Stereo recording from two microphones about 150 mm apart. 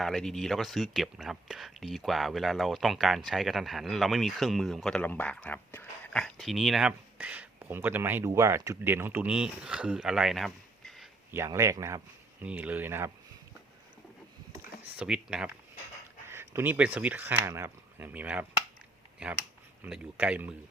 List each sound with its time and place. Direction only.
0.0 s speech: centre (ahead or behind)
6.2 s speech: centre (ahead or behind)
11.3 s speech: 20° right (ahead or behind)
14.9 s speech: 5° right (ahead or behind)
16.3 s speech: 15° right (ahead or behind)